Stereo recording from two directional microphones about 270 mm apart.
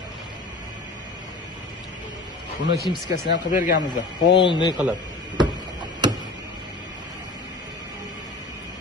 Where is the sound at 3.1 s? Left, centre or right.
Left.